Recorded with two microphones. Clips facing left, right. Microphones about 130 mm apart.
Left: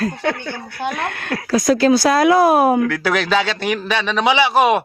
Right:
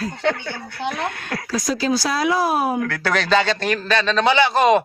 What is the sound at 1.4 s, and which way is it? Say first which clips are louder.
Speech: left 8 dB; 55° left (ahead or behind).